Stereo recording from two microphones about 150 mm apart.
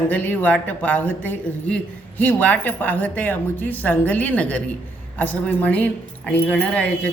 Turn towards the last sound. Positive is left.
turn(degrees=10)  # may be behind; listen again after turning